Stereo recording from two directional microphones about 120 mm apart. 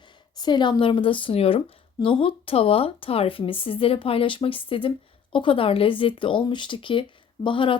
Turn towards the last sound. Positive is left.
turn(degrees=45)  # may be behind; listen again after turning